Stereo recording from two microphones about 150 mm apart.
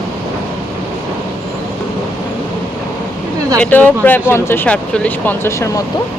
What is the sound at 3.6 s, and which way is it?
Speech, 10° left (ahead or behind).